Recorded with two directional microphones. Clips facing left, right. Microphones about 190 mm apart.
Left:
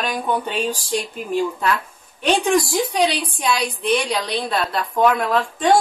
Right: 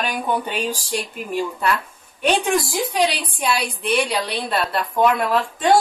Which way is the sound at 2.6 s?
5° right (ahead or behind).